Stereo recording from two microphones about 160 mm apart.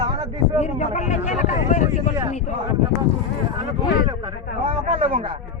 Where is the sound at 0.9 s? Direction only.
45° left (ahead or behind).